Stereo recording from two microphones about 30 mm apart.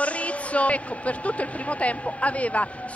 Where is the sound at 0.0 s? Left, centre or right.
Left.